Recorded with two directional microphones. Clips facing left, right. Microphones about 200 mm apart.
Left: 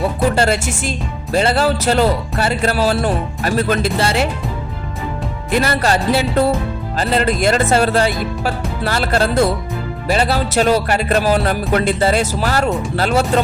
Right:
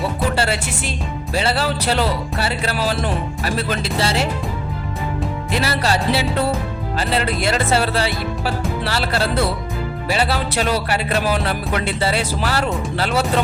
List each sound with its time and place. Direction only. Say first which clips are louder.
0.3 s speech: left 5 dB; 45° left (ahead or behind)
5.5 s speech: left 5 dB; 50° left (ahead or behind)